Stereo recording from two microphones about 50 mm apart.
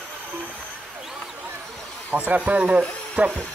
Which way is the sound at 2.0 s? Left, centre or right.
Right.